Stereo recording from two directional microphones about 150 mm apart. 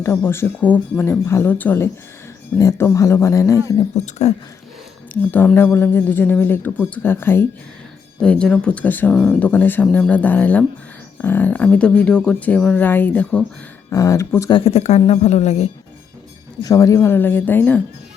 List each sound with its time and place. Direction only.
0.0 s speech: 15° left (ahead or behind)
3.9 s speech: 45° left (ahead or behind)
5.5 s speech: 15° left (ahead or behind)
14.5 s speech: 45° left (ahead or behind)
16.6 s speech: 25° left (ahead or behind)